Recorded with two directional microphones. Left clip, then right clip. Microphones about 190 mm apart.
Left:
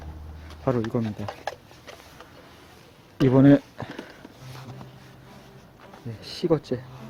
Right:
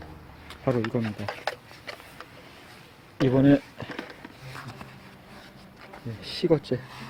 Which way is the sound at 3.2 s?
30° left (ahead or behind).